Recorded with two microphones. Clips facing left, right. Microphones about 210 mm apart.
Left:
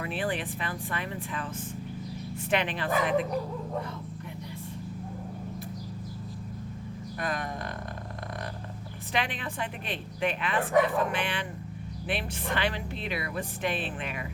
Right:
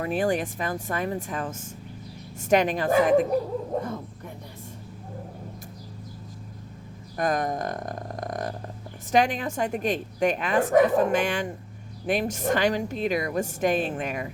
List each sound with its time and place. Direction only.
0.0 s a woman's voice: 45° right (ahead or behind)
7.2 s a sound: 45° right (ahead or behind)
9.1 s a woman's voice: 45° right (ahead or behind)